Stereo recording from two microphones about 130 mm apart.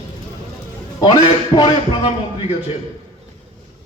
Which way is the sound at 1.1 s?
40° left (ahead or behind).